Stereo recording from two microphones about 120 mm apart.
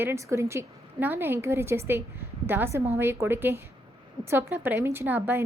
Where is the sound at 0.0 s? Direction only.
25° right (ahead or behind).